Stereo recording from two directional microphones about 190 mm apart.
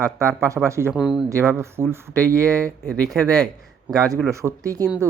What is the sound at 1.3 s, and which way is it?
Speech, 15° right (ahead or behind).